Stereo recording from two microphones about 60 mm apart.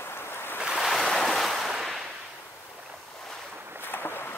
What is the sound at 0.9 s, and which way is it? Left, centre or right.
Waves, centre.